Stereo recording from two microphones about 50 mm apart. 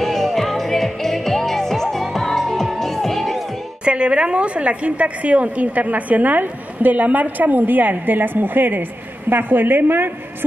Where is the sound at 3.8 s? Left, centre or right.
Right.